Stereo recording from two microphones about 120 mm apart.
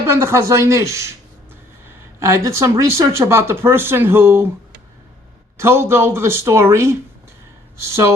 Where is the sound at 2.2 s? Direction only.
25° right (ahead or behind).